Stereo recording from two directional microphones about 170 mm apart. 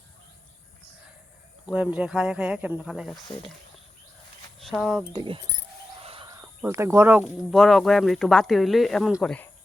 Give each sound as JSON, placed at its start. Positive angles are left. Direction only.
{"t": 1.6, "sound": "speech", "side_deg": -5}
{"t": 3.2, "sound": "speech", "side_deg": 30}
{"t": 4.6, "sound": "speech", "side_deg": 0}
{"t": 5.1, "sound": "speech", "side_deg": -30}
{"t": 6.0, "sound": "bird", "side_deg": -35}
{"t": 6.4, "sound": "speech", "side_deg": -15}
{"t": 7.5, "sound": "speech", "side_deg": 0}